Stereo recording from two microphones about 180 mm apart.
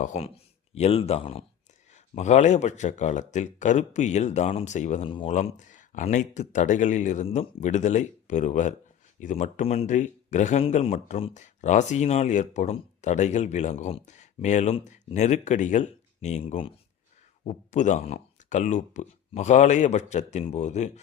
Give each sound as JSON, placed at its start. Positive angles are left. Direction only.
{"t": 0.0, "sound": "speech", "side_deg": 40}
{"t": 5.0, "sound": "speech", "side_deg": 30}
{"t": 17.4, "sound": "speech", "side_deg": 40}